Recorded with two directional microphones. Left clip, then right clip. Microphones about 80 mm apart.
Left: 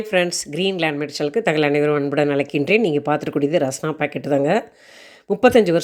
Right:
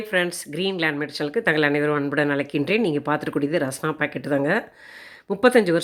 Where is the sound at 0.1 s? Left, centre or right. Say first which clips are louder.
Left 4 dB; left.